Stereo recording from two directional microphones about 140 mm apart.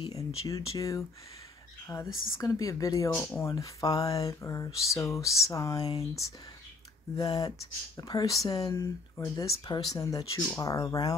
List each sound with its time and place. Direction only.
0.0 s speech: 25° left (ahead or behind)
1.9 s speech: 10° left (ahead or behind)
2.3 s a sound: 25° left (ahead or behind)